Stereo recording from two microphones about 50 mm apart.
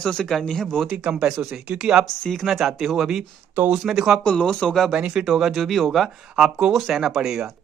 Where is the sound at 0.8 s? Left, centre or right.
Right.